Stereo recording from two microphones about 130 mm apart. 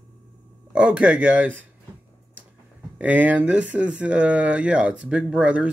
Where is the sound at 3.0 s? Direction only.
10° right (ahead or behind).